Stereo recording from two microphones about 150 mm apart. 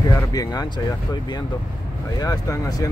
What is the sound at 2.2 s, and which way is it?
Speech, 25° left (ahead or behind).